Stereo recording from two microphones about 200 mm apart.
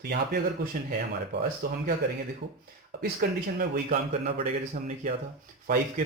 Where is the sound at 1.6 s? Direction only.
50° right (ahead or behind).